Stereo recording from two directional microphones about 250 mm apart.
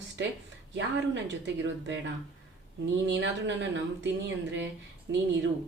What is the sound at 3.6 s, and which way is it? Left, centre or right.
Speech, right.